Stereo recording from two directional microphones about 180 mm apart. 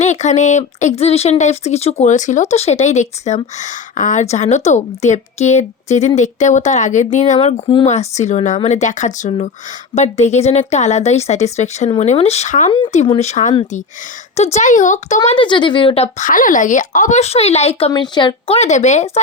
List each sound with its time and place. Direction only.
0.0 s a woman's voice: 40° left (ahead or behind)
15.4 s speech: 25° left (ahead or behind)